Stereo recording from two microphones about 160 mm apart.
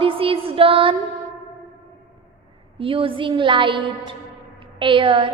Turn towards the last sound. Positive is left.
turn(degrees=-35)  # may be behind; listen again after turning